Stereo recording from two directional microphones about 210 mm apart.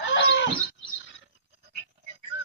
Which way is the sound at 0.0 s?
60° left (ahead or behind).